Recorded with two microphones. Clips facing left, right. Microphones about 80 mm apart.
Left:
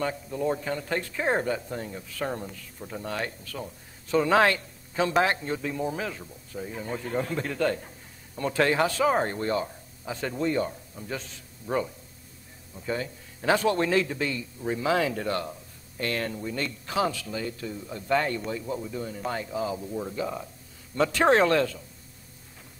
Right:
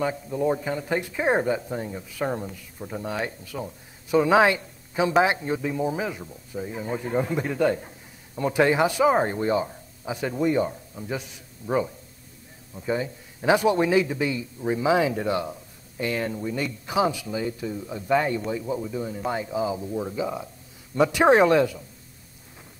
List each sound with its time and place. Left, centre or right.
0.0 s a man's voice: centre